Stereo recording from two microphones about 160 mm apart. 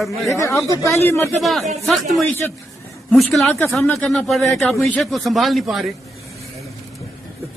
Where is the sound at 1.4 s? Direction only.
Centre (ahead or behind).